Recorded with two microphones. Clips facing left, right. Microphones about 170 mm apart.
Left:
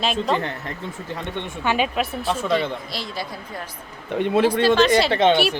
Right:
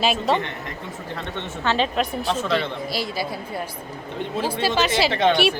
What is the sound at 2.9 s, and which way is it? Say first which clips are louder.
Speech: right 4 dB; 5° right (ahead or behind).